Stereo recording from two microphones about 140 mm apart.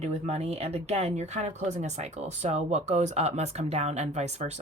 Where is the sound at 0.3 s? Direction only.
50° right (ahead or behind).